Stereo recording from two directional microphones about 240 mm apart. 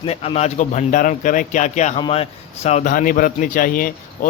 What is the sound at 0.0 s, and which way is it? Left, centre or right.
A man's voice, left.